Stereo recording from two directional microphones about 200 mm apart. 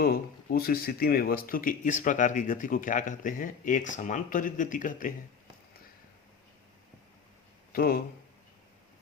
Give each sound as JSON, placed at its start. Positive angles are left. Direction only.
{"t": 0.0, "sound": "speech", "side_deg": 50}
{"t": 7.7, "sound": "speech", "side_deg": 50}